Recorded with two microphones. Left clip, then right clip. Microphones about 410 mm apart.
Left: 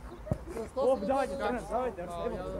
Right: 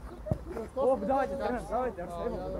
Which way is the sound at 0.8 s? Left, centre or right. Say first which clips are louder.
Right 1 dB; right.